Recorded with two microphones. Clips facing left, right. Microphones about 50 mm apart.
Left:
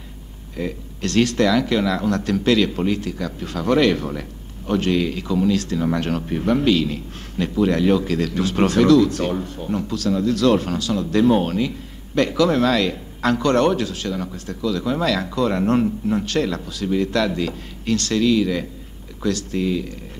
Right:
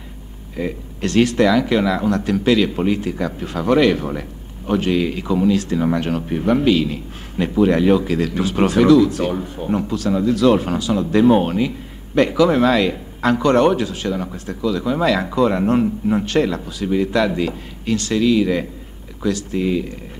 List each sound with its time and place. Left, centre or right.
0.6 s speech: centre
9.6 s speech: centre